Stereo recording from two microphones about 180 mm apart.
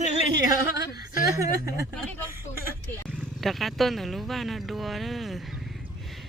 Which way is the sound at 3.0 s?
5° left (ahead or behind).